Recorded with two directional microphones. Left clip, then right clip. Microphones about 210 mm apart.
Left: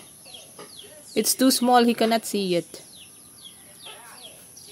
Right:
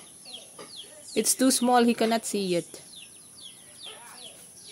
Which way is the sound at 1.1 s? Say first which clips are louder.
Left 3 dB; centre (ahead or behind).